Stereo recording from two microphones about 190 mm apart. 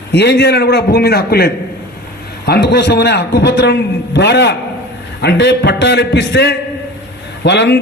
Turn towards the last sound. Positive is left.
turn(degrees=65)  # may be behind; listen again after turning